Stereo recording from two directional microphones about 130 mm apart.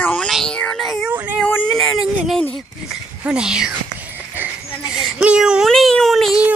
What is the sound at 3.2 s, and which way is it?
Music, 5° right (ahead or behind).